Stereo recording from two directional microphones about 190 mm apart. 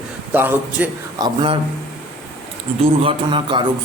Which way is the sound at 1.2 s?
25° right (ahead or behind).